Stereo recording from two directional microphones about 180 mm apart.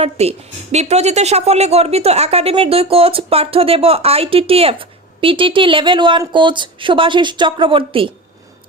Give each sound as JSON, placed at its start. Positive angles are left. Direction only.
{"t": 0.0, "sound": "speech", "side_deg": -35}